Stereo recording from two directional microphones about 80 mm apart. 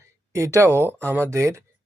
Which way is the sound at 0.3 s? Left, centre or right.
Right.